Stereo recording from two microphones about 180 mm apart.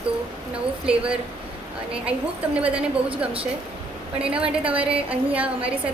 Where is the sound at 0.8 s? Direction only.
5° right (ahead or behind).